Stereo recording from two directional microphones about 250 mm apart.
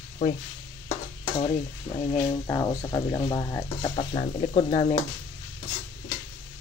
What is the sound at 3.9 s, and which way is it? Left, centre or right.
Speech, left.